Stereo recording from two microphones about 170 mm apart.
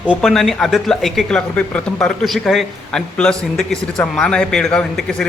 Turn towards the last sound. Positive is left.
turn(degrees=5)  # may be behind; listen again after turning